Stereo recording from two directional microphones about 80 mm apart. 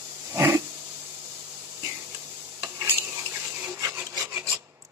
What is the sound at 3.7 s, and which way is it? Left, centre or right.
Rub, right.